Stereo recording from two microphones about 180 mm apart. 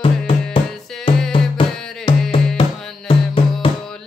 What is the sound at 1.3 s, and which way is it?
Music, 30° left (ahead or behind).